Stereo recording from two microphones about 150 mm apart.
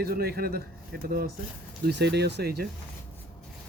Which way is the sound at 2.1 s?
90° right.